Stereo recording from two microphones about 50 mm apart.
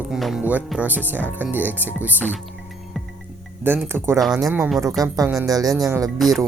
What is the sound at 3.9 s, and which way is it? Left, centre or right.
Speech, right.